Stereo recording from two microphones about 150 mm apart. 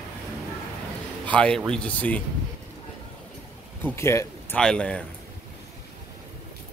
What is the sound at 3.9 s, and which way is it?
Speech, 20° left (ahead or behind).